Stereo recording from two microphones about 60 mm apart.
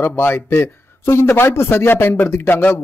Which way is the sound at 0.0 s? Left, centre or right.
Left.